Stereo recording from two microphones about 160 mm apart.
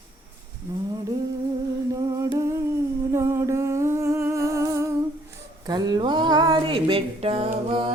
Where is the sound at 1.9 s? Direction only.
20° right (ahead or behind).